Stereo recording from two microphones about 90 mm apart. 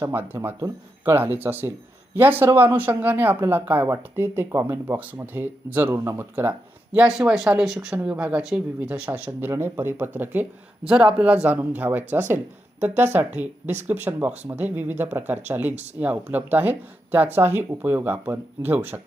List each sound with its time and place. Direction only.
0.0 s speech: 30° right (ahead or behind)
10.8 s speech: 10° right (ahead or behind)